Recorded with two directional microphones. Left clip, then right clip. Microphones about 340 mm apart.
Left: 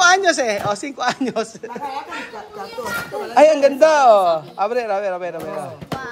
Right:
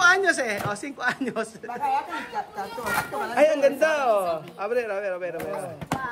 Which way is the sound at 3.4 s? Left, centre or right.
Centre.